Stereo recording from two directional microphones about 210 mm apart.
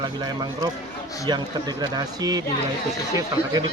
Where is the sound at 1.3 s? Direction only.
20° right (ahead or behind).